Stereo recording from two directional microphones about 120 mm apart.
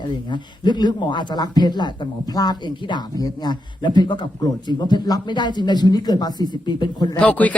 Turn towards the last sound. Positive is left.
turn(degrees=10)  # may be behind; listen again after turning